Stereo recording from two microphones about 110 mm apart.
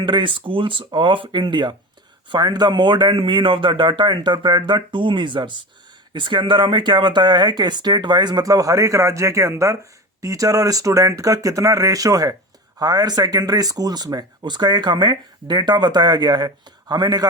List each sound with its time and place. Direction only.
0.0 s speech: 45° right (ahead or behind)